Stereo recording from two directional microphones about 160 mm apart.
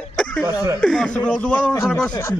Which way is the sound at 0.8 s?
5° left (ahead or behind).